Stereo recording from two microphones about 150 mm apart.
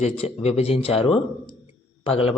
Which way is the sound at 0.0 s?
45° left (ahead or behind).